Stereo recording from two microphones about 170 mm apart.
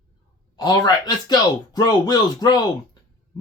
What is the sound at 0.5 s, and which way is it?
Speech, 20° left (ahead or behind).